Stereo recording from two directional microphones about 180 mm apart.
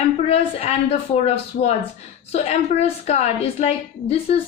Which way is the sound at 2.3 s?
35° left (ahead or behind).